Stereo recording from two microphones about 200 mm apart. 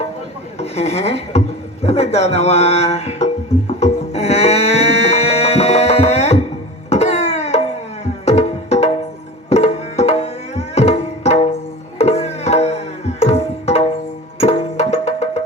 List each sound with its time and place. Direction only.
0.6 s speech: 30° left (ahead or behind)
3.8 s music: 30° left (ahead or behind)
9.5 s tabla: 35° left (ahead or behind)
14.3 s music: 30° left (ahead or behind)